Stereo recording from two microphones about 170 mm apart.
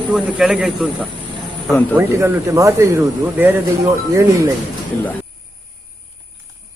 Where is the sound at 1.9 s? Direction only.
15° right (ahead or behind).